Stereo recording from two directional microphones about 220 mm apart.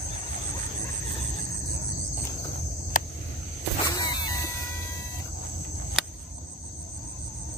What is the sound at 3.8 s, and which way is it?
Vehicle, 15° left (ahead or behind).